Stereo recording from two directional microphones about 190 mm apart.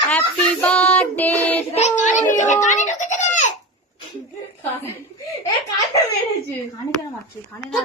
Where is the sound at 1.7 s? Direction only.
35° left (ahead or behind).